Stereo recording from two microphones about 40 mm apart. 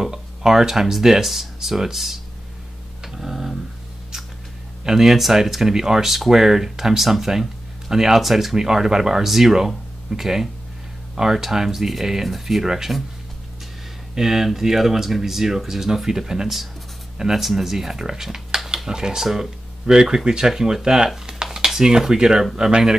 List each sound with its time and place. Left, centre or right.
0.0 s speech: centre
3.0 s tick-tock: centre
4.8 s speech: centre
14.1 s speech: centre
19.9 s speech: centre
21.3 s a sound: centre
21.6 s speech: centre